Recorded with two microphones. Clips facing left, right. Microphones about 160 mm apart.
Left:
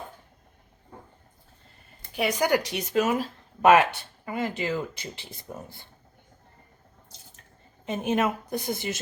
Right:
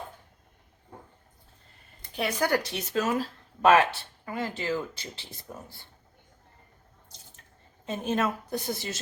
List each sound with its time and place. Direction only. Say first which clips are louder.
2.1 s speech: left 3 dB; 15° left (ahead or behind)
7.9 s speech: left 3 dB; 15° left (ahead or behind)